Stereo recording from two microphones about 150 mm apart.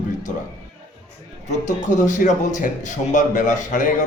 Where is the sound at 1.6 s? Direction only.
55° left (ahead or behind).